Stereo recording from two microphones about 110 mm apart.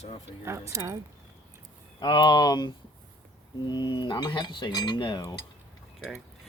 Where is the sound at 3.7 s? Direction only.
45° left (ahead or behind).